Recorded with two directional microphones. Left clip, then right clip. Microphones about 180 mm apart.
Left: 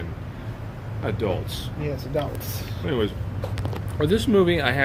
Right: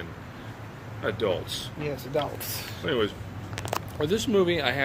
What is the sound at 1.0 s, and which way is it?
Speech, 20° left (ahead or behind).